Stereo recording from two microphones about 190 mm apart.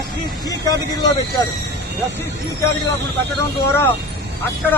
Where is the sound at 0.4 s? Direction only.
20° left (ahead or behind).